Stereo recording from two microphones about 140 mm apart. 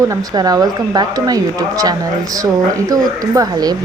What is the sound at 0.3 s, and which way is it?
Speech, 25° right (ahead or behind).